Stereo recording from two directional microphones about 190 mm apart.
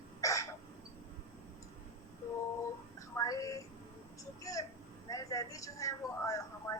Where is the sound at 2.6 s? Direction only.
15° left (ahead or behind).